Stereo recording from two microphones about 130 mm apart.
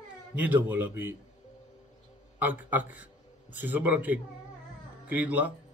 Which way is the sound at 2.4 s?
15° right (ahead or behind).